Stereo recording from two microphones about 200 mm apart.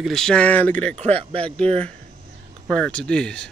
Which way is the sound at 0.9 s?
30° right (ahead or behind).